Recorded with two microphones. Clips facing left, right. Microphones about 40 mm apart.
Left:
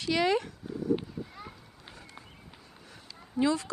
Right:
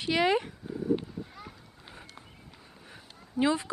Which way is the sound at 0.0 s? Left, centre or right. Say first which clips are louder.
Right 1 dB; centre.